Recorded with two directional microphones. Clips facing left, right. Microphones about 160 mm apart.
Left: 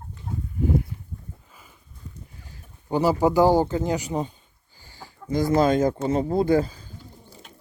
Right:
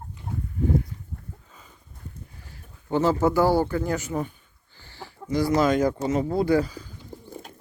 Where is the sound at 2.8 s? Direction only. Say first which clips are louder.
Left 1 dB; 15° left (ahead or behind).